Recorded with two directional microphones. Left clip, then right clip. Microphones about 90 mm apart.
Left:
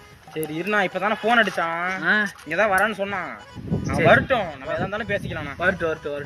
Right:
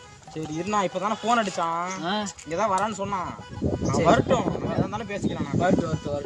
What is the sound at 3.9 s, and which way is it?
Speech, 45° right (ahead or behind).